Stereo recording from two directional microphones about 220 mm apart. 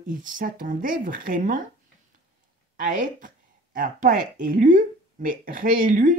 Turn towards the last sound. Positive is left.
turn(degrees=-35)  # may be behind; listen again after turning